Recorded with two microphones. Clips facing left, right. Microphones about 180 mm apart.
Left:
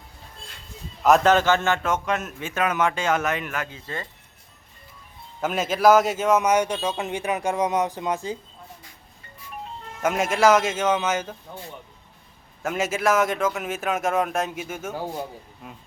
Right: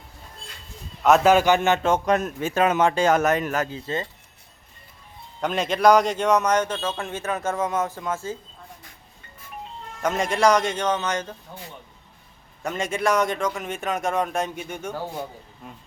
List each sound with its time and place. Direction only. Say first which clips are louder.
1.0 s a man's voice: right 1 dB; 5° right (ahead or behind); by 3.8 s 40° right (ahead or behind)
5.4 s a man's voice: even; 5° left (ahead or behind)
10.0 s a man's voice: left 1 dB; 5° left (ahead or behind)
12.6 s speech: left 1 dB; 5° left (ahead or behind)